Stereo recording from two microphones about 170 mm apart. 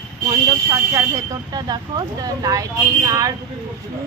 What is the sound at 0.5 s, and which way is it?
Speech, 15° right (ahead or behind).